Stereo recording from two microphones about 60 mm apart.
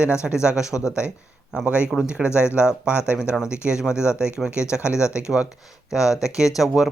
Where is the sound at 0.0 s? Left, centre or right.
Centre.